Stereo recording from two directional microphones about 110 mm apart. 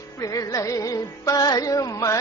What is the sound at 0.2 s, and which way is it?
Music, 30° left (ahead or behind).